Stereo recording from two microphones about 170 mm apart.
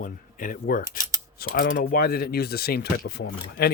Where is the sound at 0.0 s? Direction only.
50° left (ahead or behind).